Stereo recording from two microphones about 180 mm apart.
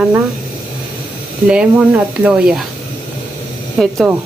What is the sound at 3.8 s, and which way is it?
Speech, centre (ahead or behind).